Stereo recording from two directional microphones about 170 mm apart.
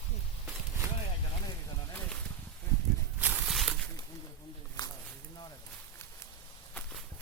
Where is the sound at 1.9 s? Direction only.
10° left (ahead or behind).